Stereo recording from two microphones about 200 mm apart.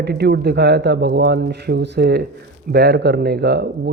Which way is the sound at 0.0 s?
55° right (ahead or behind).